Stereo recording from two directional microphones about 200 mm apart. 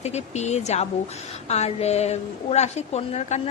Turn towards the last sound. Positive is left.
turn(degrees=35)  # may be behind; listen again after turning